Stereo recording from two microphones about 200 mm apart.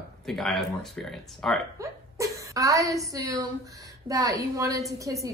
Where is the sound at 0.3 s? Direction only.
Centre (ahead or behind).